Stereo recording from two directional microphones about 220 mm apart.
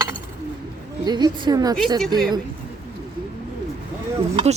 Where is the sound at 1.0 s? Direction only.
20° right (ahead or behind).